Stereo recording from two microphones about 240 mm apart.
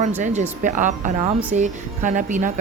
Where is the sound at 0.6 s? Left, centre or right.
Right.